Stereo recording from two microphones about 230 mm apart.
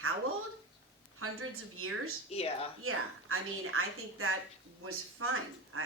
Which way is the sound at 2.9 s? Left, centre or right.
Right.